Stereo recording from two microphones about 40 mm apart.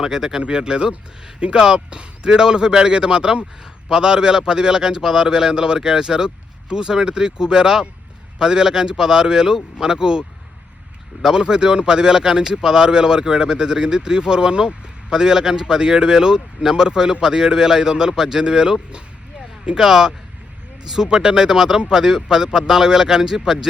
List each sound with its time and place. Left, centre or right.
0.0 s speech: centre